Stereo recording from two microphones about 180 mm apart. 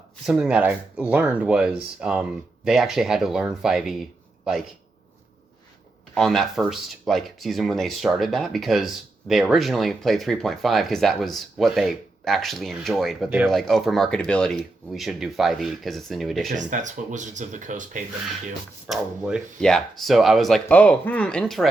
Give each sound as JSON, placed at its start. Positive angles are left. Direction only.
{"t": 0.3, "sound": "speech", "side_deg": -5}
{"t": 6.1, "sound": "speech", "side_deg": 0}
{"t": 16.5, "sound": "speech", "side_deg": -45}
{"t": 18.9, "sound": "speech", "side_deg": -5}